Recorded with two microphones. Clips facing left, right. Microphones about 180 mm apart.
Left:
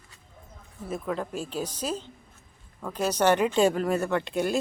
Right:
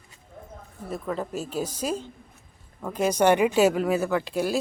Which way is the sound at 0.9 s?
Centre (ahead or behind).